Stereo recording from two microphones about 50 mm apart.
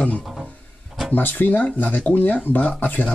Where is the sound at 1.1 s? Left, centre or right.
Left.